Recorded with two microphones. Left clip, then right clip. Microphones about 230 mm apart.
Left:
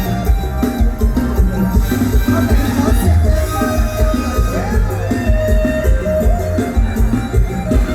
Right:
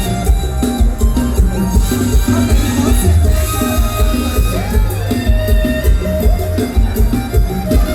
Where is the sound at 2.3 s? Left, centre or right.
Right.